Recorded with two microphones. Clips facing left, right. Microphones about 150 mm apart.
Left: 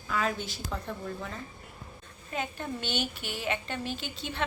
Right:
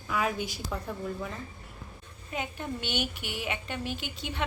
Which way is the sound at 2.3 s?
15° right (ahead or behind).